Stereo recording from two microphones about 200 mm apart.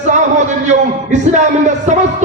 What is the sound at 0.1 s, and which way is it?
A man's voice, 35° right (ahead or behind).